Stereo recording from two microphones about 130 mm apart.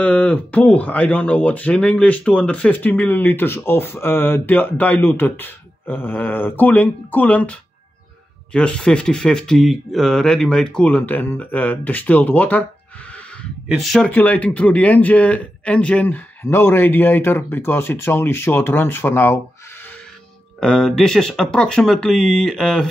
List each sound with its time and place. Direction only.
0.0 s speech: 10° left (ahead or behind)
8.5 s speech: 5° left (ahead or behind)
13.7 s speech: centre (ahead or behind)
14.1 s speech: 10° left (ahead or behind)
20.6 s speech: 5° left (ahead or behind)